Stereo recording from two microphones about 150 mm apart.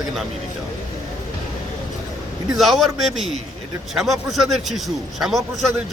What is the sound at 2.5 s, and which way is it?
A man's voice, centre (ahead or behind).